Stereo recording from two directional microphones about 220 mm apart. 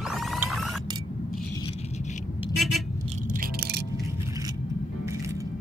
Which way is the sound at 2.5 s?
Centre (ahead or behind).